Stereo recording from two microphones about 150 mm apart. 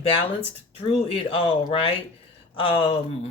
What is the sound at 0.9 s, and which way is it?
Speech, 40° left (ahead or behind).